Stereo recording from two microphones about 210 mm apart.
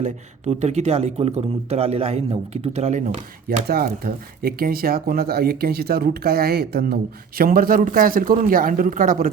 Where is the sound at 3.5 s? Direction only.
45° right (ahead or behind).